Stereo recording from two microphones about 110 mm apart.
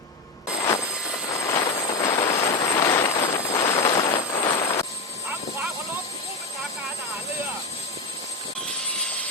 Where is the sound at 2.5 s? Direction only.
45° left (ahead or behind).